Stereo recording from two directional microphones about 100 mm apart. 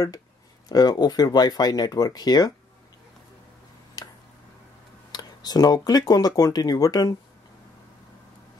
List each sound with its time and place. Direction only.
0.7 s speech: 40° left (ahead or behind)
5.1 s speech: 40° left (ahead or behind)